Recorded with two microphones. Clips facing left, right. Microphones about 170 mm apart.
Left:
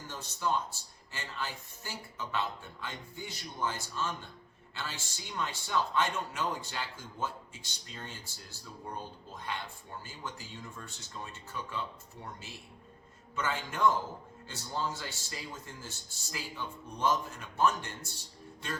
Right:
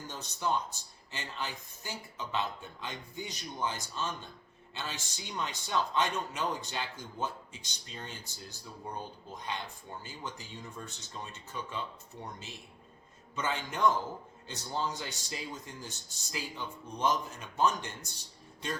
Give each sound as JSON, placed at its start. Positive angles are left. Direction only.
{"t": 0.1, "sound": "a woman's voice", "side_deg": -20}